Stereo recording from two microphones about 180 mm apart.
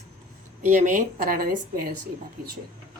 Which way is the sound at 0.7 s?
45° right (ahead or behind).